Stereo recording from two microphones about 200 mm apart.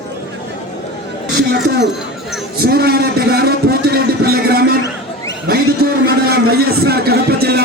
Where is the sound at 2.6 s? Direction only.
50° right (ahead or behind).